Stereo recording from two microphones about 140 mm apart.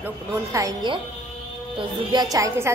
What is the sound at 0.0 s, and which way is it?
A woman's voice, 25° right (ahead or behind).